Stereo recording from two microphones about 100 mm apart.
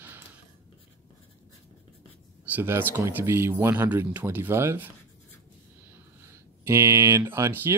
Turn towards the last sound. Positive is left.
turn(degrees=-25)  # may be behind; listen again after turning